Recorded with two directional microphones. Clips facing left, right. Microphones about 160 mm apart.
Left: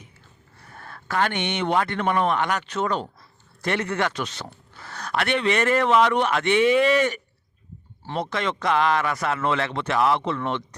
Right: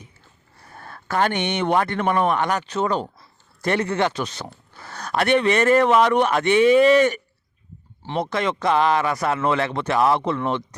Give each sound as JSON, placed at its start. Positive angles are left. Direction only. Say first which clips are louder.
{"t": 0.7, "sound": "a man's voice", "louder": "right 3 dB", "side_deg": -35}
{"t": 3.8, "sound": "speech", "louder": "right 3 dB", "side_deg": -30}
{"t": 8.2, "sound": "speech", "louder": "right 3 dB", "side_deg": -40}